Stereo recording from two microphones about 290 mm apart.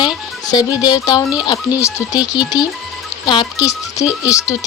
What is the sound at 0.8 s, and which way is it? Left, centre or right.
Speech, centre.